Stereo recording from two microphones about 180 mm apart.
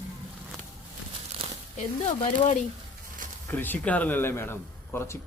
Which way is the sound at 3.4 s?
10° left (ahead or behind).